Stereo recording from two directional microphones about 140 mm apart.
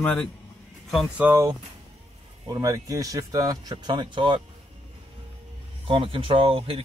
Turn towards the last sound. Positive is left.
turn(degrees=-40)  # may be behind; listen again after turning